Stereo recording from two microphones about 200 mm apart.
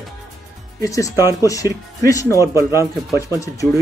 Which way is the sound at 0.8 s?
15° left (ahead or behind).